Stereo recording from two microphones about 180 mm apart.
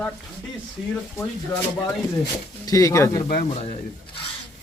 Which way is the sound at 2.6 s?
20° left (ahead or behind).